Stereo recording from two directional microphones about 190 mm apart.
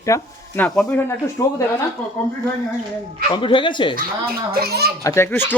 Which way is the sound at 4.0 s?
50° right (ahead or behind).